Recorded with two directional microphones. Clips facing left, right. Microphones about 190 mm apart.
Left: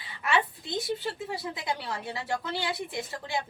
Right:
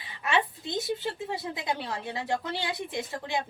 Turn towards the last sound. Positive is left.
turn(degrees=-20)  # may be behind; listen again after turning